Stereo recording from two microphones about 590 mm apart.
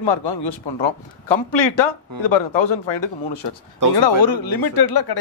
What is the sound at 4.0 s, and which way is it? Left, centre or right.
Speech, left.